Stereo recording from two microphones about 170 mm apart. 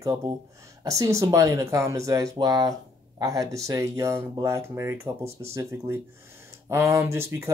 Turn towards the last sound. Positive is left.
turn(degrees=-15)  # may be behind; listen again after turning